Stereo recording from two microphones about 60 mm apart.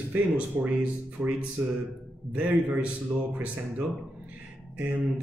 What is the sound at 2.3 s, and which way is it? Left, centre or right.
Speech, right.